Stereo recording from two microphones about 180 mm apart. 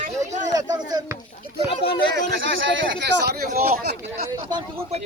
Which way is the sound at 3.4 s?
55° right (ahead or behind).